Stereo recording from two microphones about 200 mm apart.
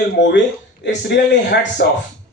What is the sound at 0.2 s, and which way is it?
Speech, 60° left (ahead or behind).